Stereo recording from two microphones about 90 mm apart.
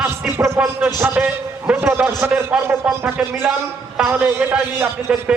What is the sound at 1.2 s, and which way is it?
Speech, 10° right (ahead or behind).